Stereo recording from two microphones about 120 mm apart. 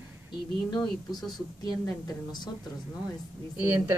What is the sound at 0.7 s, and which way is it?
Speech, 35° left (ahead or behind).